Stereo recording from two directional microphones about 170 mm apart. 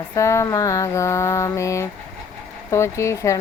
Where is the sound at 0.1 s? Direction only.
15° left (ahead or behind).